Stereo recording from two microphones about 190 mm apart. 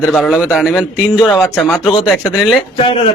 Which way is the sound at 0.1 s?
5° left (ahead or behind).